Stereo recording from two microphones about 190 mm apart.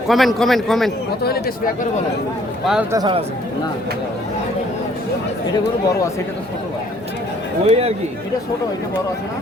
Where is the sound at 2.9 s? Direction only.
25° right (ahead or behind).